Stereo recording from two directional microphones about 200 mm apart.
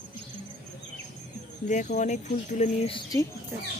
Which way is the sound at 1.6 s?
40° left (ahead or behind).